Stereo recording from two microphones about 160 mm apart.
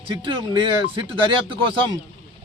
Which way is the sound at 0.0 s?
30° right (ahead or behind).